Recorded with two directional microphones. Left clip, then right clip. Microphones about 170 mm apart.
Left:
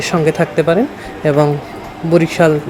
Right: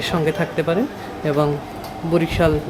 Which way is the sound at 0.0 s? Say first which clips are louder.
Left 6 dB; 30° left (ahead or behind).